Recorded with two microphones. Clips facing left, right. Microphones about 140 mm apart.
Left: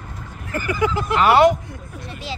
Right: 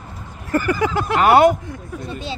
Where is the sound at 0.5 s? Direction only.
45° right (ahead or behind).